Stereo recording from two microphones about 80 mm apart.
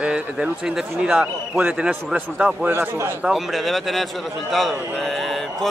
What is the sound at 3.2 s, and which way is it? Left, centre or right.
A man's voice, centre.